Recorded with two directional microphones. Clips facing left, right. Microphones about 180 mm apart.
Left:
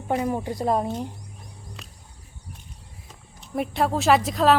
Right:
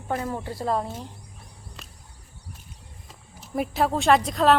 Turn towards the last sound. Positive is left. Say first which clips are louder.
# even
turn(degrees=0)  # may be behind; listen again after turning